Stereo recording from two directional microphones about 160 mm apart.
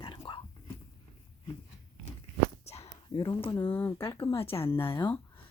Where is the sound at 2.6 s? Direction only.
40° left (ahead or behind).